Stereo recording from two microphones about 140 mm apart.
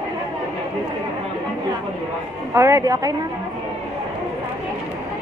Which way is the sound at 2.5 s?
20° right (ahead or behind).